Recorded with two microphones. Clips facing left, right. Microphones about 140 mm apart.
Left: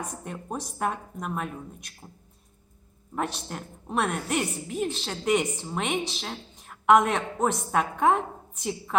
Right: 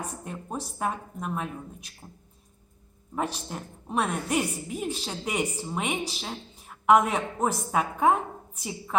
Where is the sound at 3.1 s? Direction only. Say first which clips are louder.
Even; centre (ahead or behind).